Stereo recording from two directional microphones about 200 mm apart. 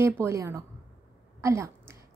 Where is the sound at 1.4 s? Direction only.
15° right (ahead or behind).